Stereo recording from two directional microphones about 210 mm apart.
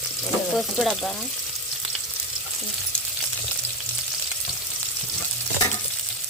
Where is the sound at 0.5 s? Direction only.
Centre (ahead or behind).